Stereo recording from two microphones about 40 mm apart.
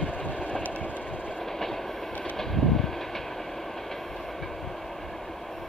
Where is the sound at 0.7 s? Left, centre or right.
Left.